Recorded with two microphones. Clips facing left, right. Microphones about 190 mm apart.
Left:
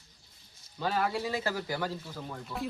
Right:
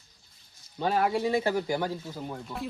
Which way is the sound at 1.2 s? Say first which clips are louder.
Right 7 dB; 25° right (ahead or behind).